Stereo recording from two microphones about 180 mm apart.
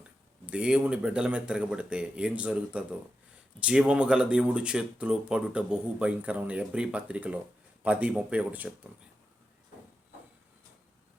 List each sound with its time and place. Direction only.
0.4 s speech: 5° right (ahead or behind)